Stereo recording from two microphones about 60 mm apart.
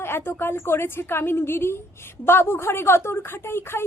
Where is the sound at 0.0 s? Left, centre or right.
Left.